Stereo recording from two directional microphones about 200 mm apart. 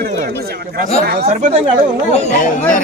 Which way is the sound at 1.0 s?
50° right (ahead or behind).